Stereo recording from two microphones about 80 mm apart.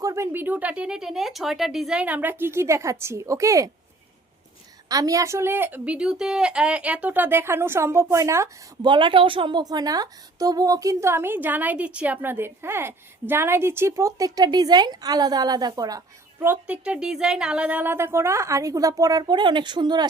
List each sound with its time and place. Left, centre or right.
0.0 s a sound: right
0.4 s speech: centre
2.0 s a woman's voice: right
4.9 s a woman's voice: right
8.8 s a woman's voice: right
16.6 s speech: centre
17.9 s a woman's voice: right